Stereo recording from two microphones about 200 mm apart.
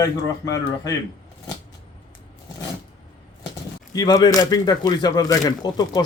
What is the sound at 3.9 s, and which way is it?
Speech, 20° left (ahead or behind).